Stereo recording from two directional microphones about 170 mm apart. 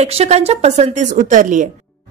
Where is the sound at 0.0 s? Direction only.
40° right (ahead or behind).